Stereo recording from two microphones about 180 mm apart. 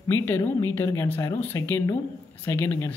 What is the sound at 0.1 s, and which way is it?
Speech, 15° left (ahead or behind).